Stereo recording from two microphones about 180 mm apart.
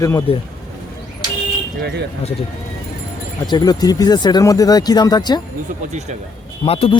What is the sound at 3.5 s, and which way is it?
Speech, 25° left (ahead or behind).